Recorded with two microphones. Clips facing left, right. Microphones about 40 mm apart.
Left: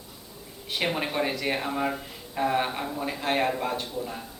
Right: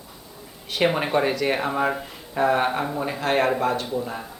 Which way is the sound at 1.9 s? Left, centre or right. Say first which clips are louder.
Right 5 dB; right.